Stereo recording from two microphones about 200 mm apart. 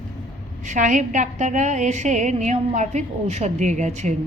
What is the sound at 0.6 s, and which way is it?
A woman's voice, 40° right (ahead or behind).